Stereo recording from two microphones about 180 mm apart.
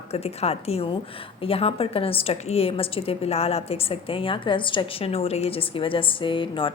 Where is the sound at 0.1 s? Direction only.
35° left (ahead or behind).